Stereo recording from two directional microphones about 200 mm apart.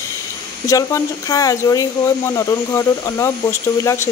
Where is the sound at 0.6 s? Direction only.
15° left (ahead or behind).